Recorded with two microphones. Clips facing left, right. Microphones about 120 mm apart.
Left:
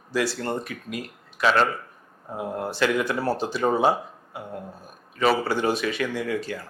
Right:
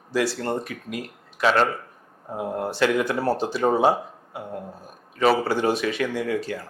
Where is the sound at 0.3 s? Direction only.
55° right (ahead or behind).